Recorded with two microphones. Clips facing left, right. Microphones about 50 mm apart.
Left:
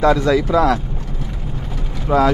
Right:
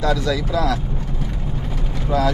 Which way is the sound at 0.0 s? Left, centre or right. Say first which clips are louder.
Left 6 dB; left.